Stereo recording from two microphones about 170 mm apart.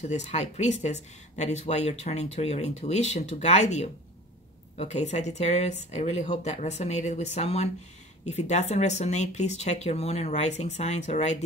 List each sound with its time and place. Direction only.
0.1 s speech: 40° left (ahead or behind)